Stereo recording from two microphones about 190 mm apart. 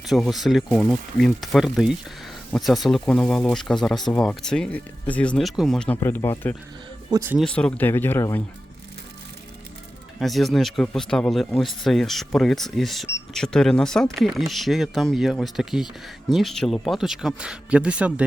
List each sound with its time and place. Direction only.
0.1 s speech: centre (ahead or behind)
7.1 s speech: 15° right (ahead or behind)
7.3 s speech: 5° left (ahead or behind)
10.2 s speech: centre (ahead or behind)